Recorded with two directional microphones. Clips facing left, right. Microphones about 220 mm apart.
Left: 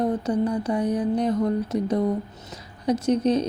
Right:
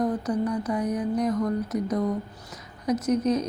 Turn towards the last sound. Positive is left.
turn(degrees=30)  # may be behind; listen again after turning